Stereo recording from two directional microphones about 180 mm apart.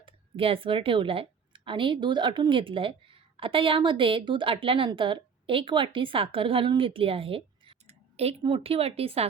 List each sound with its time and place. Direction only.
0.0 s a woman's voice: 30° right (ahead or behind)